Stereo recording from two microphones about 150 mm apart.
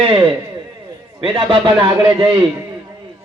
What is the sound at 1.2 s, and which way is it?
Speech, 35° right (ahead or behind).